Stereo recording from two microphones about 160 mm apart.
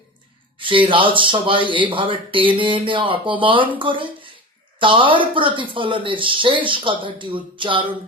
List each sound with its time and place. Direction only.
0.6 s speech: 30° right (ahead or behind)